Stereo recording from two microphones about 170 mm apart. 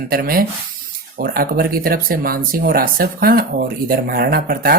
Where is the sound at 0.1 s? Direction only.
60° right (ahead or behind).